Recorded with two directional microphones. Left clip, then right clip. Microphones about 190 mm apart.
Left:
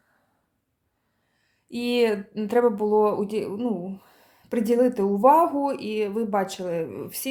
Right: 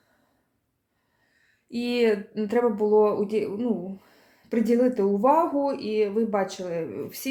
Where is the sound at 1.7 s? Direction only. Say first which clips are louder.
Left 1 dB; 25° left (ahead or behind).